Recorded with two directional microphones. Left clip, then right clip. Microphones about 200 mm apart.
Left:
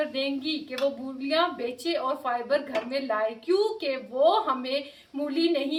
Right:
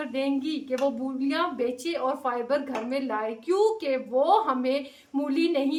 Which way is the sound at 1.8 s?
15° right (ahead or behind).